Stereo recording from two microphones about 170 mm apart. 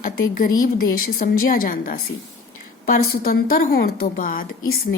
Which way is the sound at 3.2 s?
60° left (ahead or behind).